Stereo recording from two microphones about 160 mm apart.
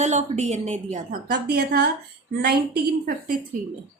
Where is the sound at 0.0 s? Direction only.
45° right (ahead or behind).